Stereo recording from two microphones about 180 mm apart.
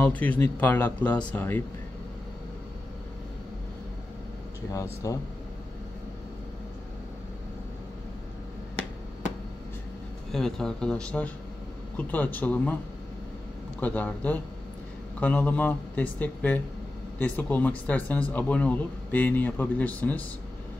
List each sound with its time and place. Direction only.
0.0 s speech: 10° left (ahead or behind)
4.6 s speech: 20° left (ahead or behind)
10.3 s speech: centre (ahead or behind)
13.7 s speech: 10° left (ahead or behind)